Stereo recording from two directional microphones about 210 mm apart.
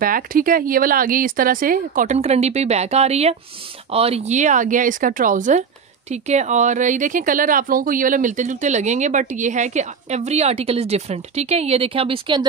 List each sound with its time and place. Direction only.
0.0 s speech: 40° right (ahead or behind); by 12.4 s 25° right (ahead or behind)